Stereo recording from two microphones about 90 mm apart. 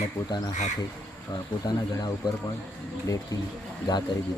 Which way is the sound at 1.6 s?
45° left (ahead or behind).